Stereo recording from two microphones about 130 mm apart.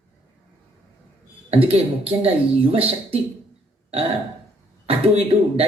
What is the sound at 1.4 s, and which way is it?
Speech, 45° right (ahead or behind).